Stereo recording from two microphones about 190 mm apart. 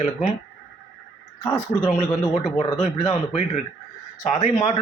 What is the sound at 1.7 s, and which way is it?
Speech, 25° left (ahead or behind).